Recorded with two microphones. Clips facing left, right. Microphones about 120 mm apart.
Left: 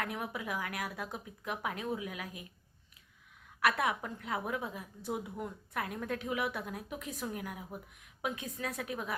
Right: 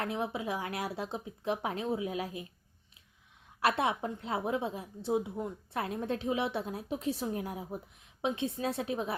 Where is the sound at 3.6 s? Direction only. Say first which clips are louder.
Right 2 dB; 30° right (ahead or behind).